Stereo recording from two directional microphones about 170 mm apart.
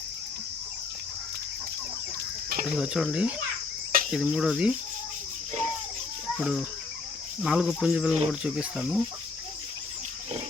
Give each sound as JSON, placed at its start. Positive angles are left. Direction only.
{"t": 2.7, "sound": "speech", "side_deg": -5}
{"t": 6.4, "sound": "speech", "side_deg": -5}